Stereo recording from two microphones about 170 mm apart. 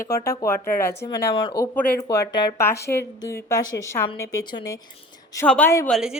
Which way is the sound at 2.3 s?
20° left (ahead or behind).